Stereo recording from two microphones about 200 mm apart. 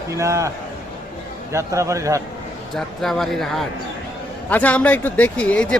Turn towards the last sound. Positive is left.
turn(degrees=5)  # may be behind; listen again after turning